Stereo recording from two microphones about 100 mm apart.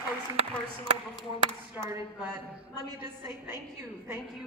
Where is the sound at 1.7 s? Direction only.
25° right (ahead or behind).